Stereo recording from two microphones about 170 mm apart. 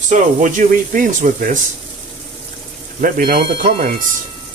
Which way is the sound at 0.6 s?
45° right (ahead or behind).